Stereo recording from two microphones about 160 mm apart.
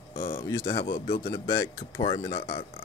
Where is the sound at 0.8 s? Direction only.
35° left (ahead or behind).